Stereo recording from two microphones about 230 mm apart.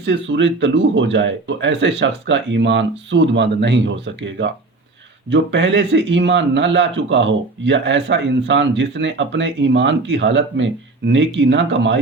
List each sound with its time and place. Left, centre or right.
0.0 s speech: right